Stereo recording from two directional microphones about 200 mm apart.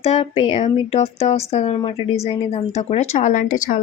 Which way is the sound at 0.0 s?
30° left (ahead or behind).